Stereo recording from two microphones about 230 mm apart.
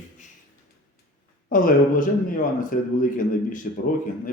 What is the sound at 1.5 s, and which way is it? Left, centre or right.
A man's voice, left.